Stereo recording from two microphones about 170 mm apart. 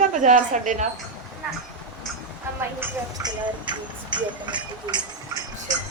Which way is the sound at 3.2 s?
25° right (ahead or behind).